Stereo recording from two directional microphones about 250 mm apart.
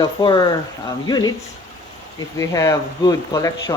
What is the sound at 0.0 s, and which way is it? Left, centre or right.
Speech, centre.